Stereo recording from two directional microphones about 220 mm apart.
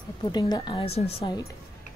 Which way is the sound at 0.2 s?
20° left (ahead or behind).